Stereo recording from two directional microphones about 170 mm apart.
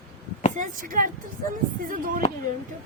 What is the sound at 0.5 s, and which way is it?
Speech, 50° right (ahead or behind).